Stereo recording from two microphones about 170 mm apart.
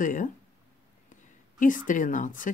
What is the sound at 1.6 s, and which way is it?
Speech, 50° left (ahead or behind).